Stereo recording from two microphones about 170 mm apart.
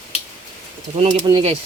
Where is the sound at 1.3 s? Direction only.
25° right (ahead or behind).